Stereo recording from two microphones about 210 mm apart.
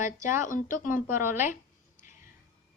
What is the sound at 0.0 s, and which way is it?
Speech, 35° left (ahead or behind).